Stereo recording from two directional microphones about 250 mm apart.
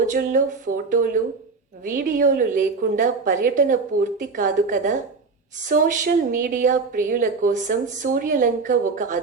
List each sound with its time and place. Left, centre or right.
0.0 s a woman's voice: right